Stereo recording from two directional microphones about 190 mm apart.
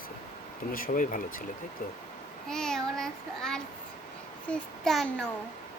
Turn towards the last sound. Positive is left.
turn(degrees=5)  # may be behind; listen again after turning